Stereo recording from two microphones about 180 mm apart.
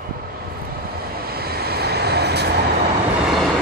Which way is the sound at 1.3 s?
60° right (ahead or behind).